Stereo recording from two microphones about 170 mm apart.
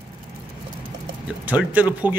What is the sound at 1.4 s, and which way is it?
Speech, 10° right (ahead or behind).